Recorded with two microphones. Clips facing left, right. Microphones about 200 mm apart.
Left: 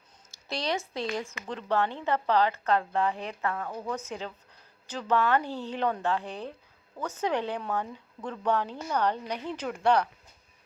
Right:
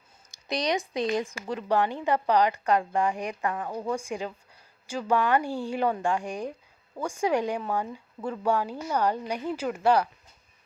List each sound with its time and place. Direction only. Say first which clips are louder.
0.3 s speech: right 4 dB; 15° right (ahead or behind)